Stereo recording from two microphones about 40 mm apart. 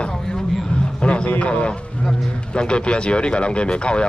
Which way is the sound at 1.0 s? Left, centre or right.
Left.